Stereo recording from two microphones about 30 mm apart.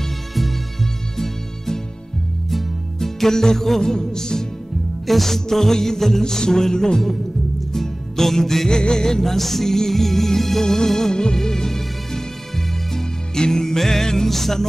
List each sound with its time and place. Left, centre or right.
0.3 s music: centre
1.1 s music: centre
3.9 s music: left
5.0 s music: centre
8.6 s music: left
9.2 s music: centre